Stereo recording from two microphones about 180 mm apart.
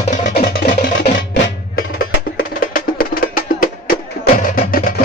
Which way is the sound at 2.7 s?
50° left (ahead or behind).